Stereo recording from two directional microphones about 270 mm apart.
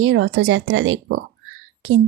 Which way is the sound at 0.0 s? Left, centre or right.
Right.